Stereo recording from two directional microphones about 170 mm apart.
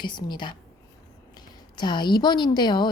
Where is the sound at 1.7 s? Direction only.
25° left (ahead or behind).